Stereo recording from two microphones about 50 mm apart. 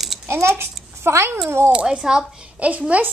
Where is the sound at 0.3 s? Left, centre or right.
Right.